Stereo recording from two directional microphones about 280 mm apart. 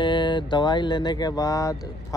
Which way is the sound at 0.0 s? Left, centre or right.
Centre.